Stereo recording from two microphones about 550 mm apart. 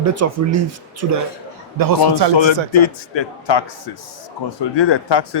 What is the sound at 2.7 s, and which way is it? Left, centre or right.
A man's voice, left.